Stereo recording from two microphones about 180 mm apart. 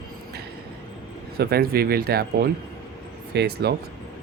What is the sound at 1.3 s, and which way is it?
Speech, 60° right (ahead or behind).